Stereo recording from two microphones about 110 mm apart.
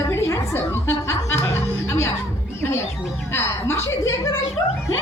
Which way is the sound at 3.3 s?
20° left (ahead or behind).